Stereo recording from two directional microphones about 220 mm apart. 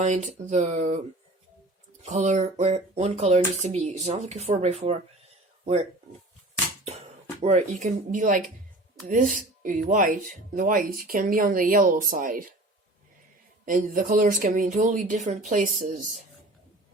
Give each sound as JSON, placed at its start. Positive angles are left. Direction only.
{"t": 0.0, "sound": "speech", "side_deg": -35}
{"t": 2.0, "sound": "speech", "side_deg": -30}
{"t": 7.4, "sound": "speech", "side_deg": -35}
{"t": 13.7, "sound": "speech", "side_deg": -40}